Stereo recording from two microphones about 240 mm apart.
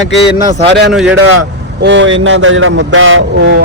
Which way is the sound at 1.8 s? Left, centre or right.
Right.